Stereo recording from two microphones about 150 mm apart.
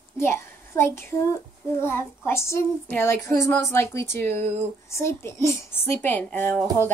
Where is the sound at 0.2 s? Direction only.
15° left (ahead or behind).